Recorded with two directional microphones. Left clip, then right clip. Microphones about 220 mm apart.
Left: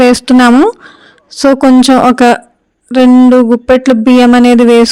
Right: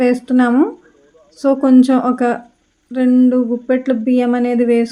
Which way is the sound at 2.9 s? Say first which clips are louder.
Left 10 dB; 45° left (ahead or behind).